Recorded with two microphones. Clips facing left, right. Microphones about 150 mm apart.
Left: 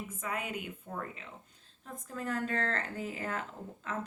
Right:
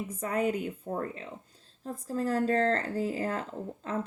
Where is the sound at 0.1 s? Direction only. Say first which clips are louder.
Right 11 dB; 40° right (ahead or behind).